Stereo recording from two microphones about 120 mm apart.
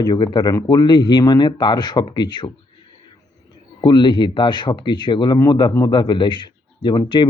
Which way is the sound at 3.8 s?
40° left (ahead or behind).